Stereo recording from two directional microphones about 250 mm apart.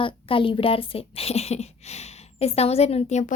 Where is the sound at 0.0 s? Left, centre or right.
Left.